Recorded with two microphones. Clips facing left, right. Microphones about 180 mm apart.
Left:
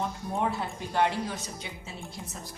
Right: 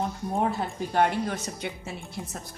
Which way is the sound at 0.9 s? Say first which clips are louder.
Right 3 dB; 60° right (ahead or behind).